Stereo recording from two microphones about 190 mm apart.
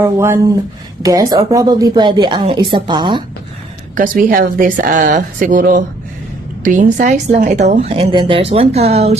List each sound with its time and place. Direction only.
0.0 s speech: 15° right (ahead or behind)
3.9 s a woman's voice: 45° right (ahead or behind)